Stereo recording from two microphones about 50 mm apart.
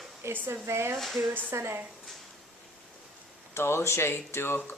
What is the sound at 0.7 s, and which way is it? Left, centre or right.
Speech, right.